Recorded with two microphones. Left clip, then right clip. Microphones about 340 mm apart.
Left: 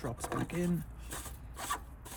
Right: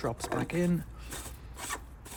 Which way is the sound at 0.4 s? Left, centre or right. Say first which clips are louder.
Right 5 dB; right.